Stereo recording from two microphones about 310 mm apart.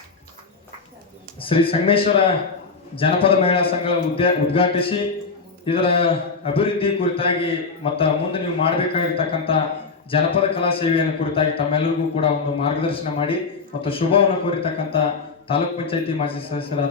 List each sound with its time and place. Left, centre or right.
1.4 s a man's voice: centre